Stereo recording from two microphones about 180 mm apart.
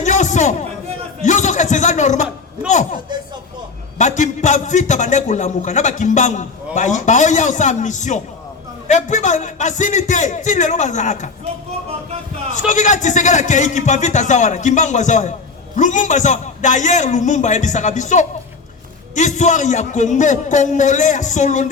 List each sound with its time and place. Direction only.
0.0 s a sound: 40° left (ahead or behind)
3.9 s a man's voice: 45° left (ahead or behind)
12.5 s a man's voice: 45° left (ahead or behind)